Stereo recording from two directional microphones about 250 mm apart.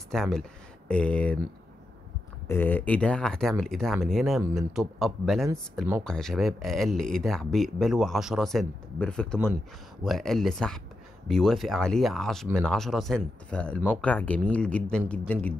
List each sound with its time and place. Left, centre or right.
0.1 s speech: centre
2.4 s speech: centre
6.0 s speech: centre